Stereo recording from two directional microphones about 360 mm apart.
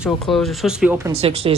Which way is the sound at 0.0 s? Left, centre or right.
Centre.